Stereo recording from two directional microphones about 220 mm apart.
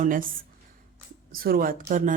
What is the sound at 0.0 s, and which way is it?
Speech, 40° right (ahead or behind).